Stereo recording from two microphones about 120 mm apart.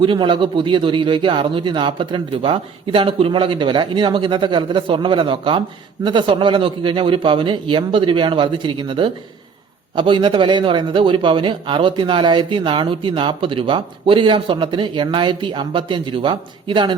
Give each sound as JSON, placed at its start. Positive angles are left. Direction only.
{"t": 0.0, "sound": "a man's voice", "side_deg": -45}